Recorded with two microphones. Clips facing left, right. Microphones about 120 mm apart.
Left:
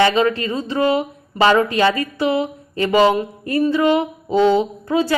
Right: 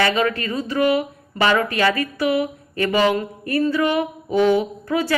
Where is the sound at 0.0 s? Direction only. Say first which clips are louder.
Left 4 dB; 25° left (ahead or behind).